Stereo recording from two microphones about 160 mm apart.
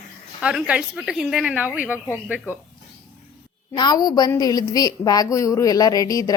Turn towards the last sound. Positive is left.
turn(degrees=20)  # may be behind; listen again after turning